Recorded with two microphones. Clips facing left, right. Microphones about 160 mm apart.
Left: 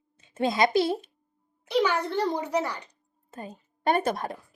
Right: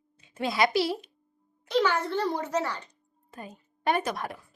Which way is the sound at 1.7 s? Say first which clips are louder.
Left 1 dB; 15° left (ahead or behind).